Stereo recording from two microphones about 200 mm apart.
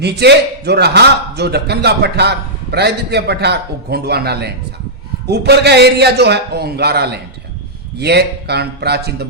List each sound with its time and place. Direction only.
0.0 s a man's voice: 55° right (ahead or behind)